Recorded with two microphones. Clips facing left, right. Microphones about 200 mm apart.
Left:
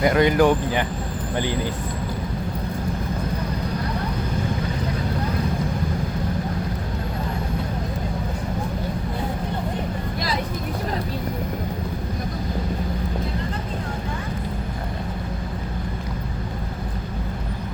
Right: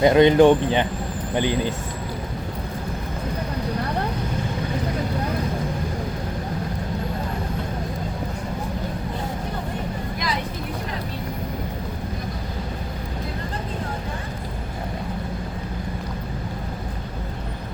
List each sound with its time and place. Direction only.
0.0 s speech: 25° right (ahead or behind)